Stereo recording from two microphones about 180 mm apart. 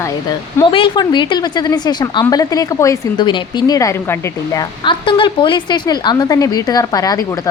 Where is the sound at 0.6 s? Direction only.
30° left (ahead or behind).